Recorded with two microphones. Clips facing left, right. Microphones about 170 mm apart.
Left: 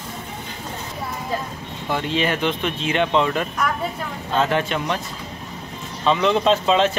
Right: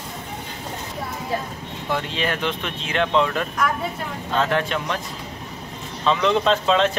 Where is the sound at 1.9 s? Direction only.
Centre (ahead or behind).